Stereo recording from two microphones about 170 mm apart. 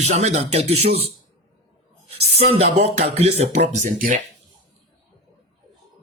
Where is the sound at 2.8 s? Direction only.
40° right (ahead or behind).